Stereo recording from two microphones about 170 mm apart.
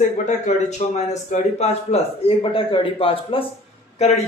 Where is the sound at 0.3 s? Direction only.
45° left (ahead or behind).